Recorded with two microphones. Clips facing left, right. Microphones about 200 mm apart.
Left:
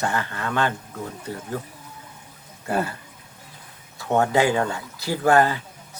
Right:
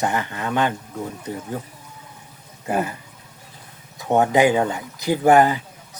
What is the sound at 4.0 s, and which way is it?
Speech, 15° right (ahead or behind).